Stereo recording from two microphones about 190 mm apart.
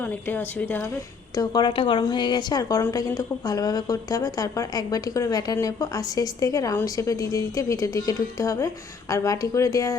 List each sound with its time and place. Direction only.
0.0 s speech: 10° left (ahead or behind)
1.4 s a woman's voice: 25° left (ahead or behind)